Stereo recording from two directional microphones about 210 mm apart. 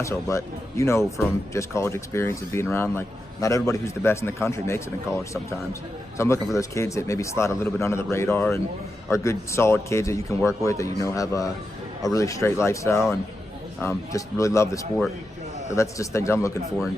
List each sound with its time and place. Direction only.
0.0 s a man's voice: 15° left (ahead or behind)
6.1 s a man's voice: 15° left (ahead or behind)